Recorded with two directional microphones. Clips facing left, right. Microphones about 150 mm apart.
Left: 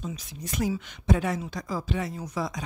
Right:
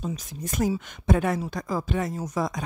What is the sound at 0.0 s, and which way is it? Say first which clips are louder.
Speech: right 4 dB; 45° right (ahead or behind).